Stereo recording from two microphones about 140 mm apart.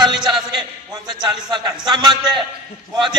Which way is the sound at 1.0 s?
30° right (ahead or behind).